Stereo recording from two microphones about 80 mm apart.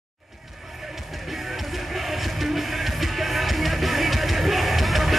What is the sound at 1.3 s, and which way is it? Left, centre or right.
Music, centre.